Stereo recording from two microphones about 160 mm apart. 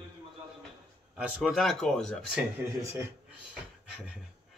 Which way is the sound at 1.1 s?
5° right (ahead or behind).